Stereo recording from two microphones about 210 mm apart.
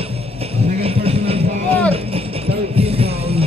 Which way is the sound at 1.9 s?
30° right (ahead or behind).